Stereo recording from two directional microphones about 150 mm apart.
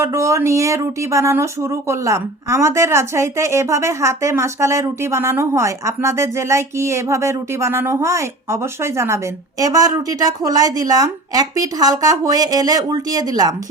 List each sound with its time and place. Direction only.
0.0 s speech: 20° right (ahead or behind)